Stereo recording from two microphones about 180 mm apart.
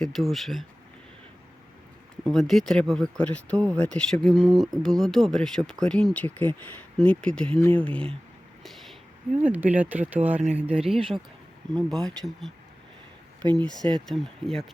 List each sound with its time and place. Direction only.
0.0 s speech: centre (ahead or behind)
2.2 s speech: centre (ahead or behind)
8.6 s a sound: centre (ahead or behind)
9.4 s speech: 10° right (ahead or behind)
10.4 s speech: 35° right (ahead or behind)
10.8 s speech: centre (ahead or behind)